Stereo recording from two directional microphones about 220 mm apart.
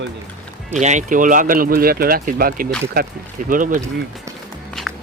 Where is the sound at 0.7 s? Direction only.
30° right (ahead or behind).